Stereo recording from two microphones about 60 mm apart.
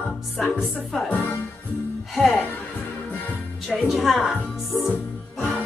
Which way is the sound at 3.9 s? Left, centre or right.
Centre.